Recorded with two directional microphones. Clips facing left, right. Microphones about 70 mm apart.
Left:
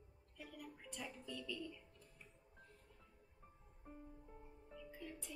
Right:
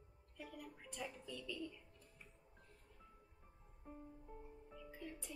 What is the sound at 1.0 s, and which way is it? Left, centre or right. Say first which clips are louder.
Speech: right 1 dB; centre.